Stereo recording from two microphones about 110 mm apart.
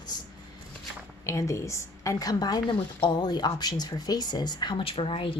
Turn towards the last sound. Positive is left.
turn(degrees=55)  # may be behind; listen again after turning